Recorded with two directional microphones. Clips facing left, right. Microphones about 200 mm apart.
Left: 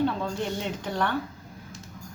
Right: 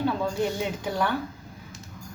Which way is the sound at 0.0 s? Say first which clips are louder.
Right 1 dB; 5° right (ahead or behind).